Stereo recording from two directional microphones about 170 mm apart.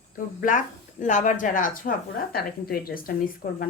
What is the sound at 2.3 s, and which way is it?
Speech, 60° left (ahead or behind).